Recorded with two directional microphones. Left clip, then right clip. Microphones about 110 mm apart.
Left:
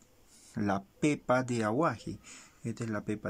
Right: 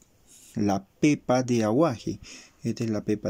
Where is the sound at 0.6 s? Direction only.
20° right (ahead or behind).